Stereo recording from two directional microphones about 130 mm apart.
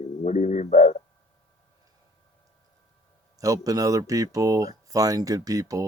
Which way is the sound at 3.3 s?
25° right (ahead or behind).